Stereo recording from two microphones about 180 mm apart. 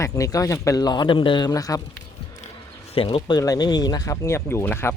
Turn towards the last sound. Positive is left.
turn(degrees=10)  # may be behind; listen again after turning